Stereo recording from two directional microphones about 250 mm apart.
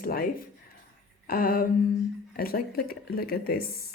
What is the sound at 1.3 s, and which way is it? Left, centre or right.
Speech, left.